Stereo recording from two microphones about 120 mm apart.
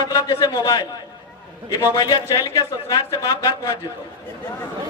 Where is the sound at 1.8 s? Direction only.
30° left (ahead or behind).